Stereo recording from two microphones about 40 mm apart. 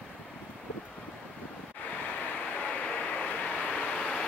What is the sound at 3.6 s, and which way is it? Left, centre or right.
Vehicle, left.